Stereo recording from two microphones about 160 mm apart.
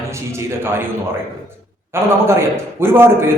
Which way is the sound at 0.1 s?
15° right (ahead or behind).